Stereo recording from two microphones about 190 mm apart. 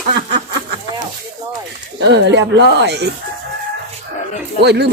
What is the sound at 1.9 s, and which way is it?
Speech, 65° right (ahead or behind).